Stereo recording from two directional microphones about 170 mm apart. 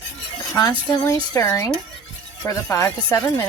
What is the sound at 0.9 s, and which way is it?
Speech, 20° left (ahead or behind).